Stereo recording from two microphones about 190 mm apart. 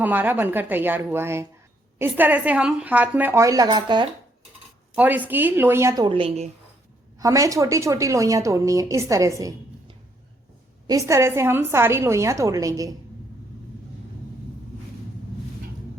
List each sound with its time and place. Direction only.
0.0 s a woman's voice: 10° right (ahead or behind)
4.9 s a woman's voice: 10° right (ahead or behind); by 6.5 s 30° right (ahead or behind)
7.2 s a woman's voice: 15° right (ahead or behind)
10.8 s a woman's voice: 15° right (ahead or behind)